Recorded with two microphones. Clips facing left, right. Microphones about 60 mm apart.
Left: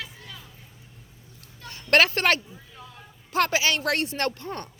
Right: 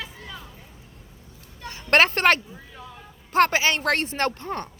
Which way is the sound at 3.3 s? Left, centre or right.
Right.